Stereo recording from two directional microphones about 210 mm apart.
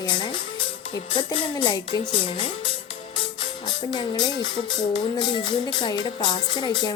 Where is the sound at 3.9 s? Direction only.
20° left (ahead or behind).